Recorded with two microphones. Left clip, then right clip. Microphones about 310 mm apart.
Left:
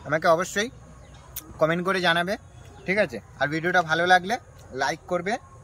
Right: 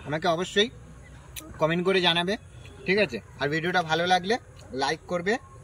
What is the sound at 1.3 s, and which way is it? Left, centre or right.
Speech, centre.